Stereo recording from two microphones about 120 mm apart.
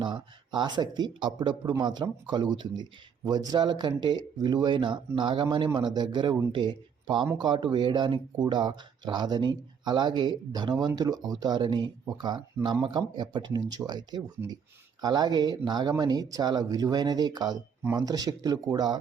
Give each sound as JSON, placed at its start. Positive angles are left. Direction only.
{"t": 0.0, "sound": "speech", "side_deg": -40}